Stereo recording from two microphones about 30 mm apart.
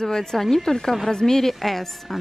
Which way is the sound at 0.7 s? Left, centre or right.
Centre.